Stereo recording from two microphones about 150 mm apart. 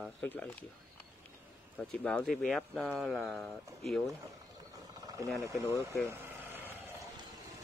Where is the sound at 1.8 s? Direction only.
10° left (ahead or behind).